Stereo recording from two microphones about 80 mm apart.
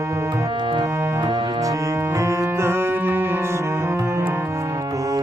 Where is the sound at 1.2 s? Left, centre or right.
Right.